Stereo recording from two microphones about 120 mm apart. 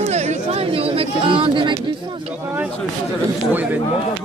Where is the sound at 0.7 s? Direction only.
50° right (ahead or behind).